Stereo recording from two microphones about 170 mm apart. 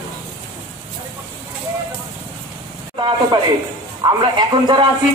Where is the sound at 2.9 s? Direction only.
25° right (ahead or behind).